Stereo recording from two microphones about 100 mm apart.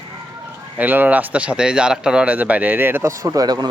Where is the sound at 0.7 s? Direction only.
20° right (ahead or behind).